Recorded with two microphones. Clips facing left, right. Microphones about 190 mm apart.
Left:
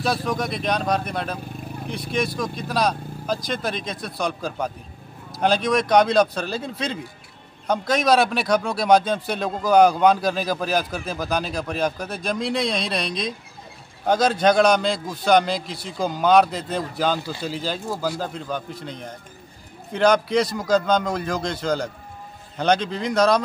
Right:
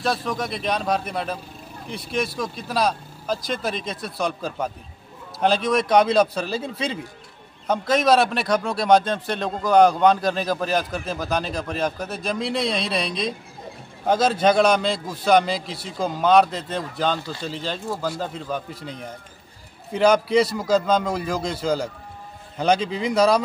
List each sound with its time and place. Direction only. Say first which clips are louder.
0.0 s a man's voice: left 1 dB; centre (ahead or behind)